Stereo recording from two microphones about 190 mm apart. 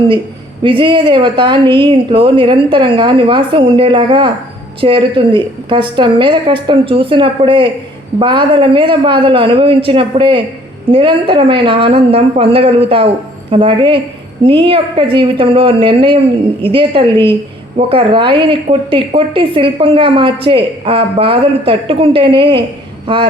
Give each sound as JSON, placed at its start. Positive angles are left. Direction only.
{"t": 0.6, "sound": "speech", "side_deg": -25}